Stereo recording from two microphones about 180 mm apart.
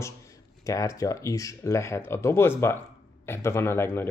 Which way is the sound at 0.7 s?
20° left (ahead or behind).